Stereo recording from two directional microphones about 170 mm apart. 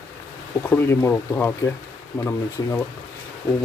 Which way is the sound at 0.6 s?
15° left (ahead or behind).